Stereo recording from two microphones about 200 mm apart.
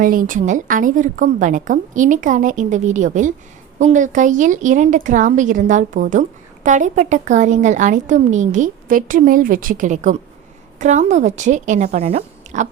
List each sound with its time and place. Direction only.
0.0 s a woman's voice: 45° right (ahead or behind)